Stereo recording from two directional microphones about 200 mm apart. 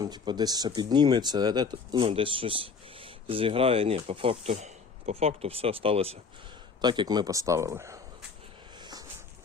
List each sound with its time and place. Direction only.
0.0 s speech: 20° right (ahead or behind)
8.8 s dog: 20° right (ahead or behind)